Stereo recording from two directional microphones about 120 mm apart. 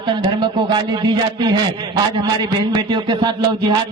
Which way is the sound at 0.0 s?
35° right (ahead or behind).